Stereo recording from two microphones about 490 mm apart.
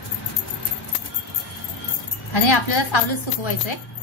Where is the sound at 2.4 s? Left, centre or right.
Left.